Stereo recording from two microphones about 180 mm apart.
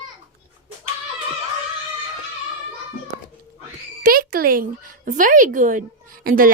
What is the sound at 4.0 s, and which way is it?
A woman's voice, 55° right (ahead or behind).